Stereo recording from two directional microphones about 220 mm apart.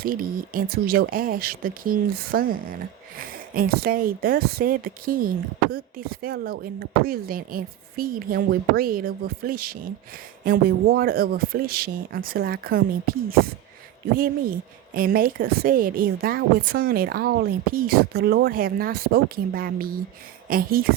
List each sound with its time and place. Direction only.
0.0 s a woman's voice: 40° right (ahead or behind)
14.9 s a woman's voice: 40° right (ahead or behind)